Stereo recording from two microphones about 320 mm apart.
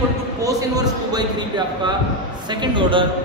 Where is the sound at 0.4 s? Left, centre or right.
Centre.